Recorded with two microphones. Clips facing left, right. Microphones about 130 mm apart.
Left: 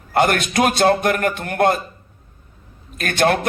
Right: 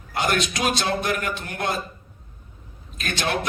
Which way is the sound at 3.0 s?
55° left (ahead or behind).